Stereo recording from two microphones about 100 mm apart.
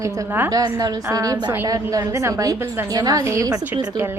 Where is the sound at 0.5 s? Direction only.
35° right (ahead or behind).